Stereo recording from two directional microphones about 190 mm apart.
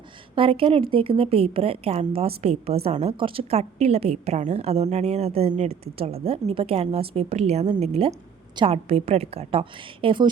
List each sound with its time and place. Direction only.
0.3 s a woman's voice: 30° right (ahead or behind)